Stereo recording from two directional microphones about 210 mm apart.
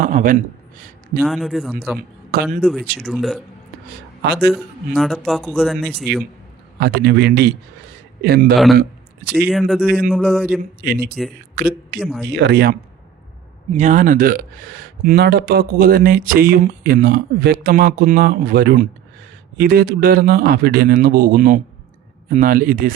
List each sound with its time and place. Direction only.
0.0 s speech: 40° right (ahead or behind)
0.8 s a sound: 40° right (ahead or behind)
1.2 s speech: centre (ahead or behind)
2.3 s speech: 45° right (ahead or behind)
3.0 s speech: centre (ahead or behind)
4.2 s speech: 50° right (ahead or behind)
4.5 s speech: centre (ahead or behind)
6.7 s speech: 50° right (ahead or behind)
9.5 s speech: centre (ahead or behind)
10.6 s speech: 45° right (ahead or behind)
11.9 s speech: 5° left (ahead or behind)
12.3 s speech: 50° right (ahead or behind)
13.7 s speech: 35° right (ahead or behind)